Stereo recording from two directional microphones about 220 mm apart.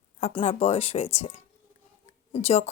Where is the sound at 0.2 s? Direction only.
30° left (ahead or behind).